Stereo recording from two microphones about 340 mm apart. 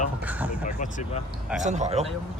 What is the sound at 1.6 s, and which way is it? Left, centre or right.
Speech, right.